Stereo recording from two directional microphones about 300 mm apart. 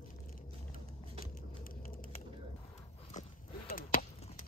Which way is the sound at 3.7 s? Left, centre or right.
Left.